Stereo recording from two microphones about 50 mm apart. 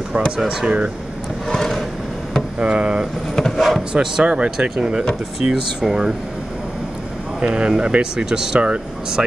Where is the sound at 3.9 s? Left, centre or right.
Centre.